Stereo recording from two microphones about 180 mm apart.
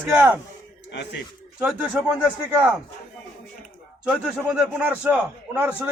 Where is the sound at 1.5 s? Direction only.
5° right (ahead or behind).